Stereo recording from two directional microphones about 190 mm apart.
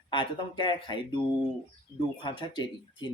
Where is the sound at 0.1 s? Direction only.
25° left (ahead or behind).